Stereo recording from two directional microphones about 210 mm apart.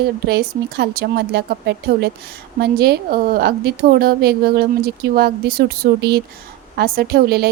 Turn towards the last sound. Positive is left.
turn(degrees=-50)  # may be behind; listen again after turning